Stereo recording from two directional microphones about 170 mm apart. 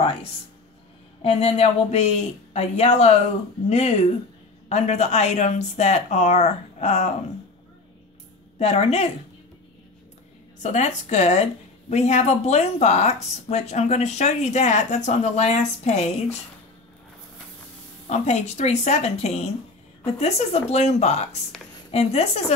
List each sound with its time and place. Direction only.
1.2 s speech: 40° left (ahead or behind)
8.5 s speech: 40° left (ahead or behind)
10.6 s speech: 45° left (ahead or behind)
18.0 s speech: 40° left (ahead or behind)